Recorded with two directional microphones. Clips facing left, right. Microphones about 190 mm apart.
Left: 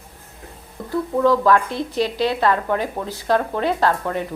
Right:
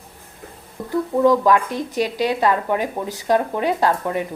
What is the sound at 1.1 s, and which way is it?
Speech, 15° right (ahead or behind).